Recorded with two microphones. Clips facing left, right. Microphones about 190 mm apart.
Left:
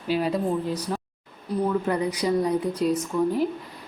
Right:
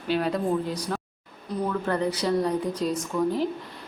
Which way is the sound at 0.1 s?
5° left (ahead or behind).